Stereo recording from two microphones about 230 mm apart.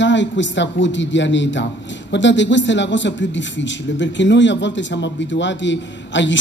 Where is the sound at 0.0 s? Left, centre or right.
Left.